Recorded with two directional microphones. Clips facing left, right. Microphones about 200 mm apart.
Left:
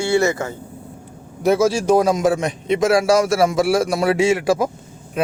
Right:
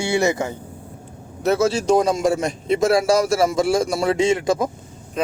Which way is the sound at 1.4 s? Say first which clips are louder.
Left 2 dB; 10° left (ahead or behind).